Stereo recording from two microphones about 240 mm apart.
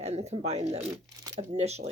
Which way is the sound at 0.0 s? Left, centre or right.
Right.